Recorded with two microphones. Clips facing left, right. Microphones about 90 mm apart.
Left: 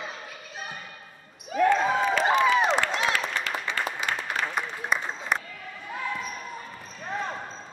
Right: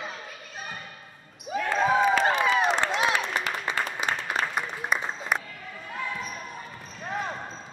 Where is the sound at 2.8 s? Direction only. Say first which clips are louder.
Right 1 dB; 20° right (ahead or behind).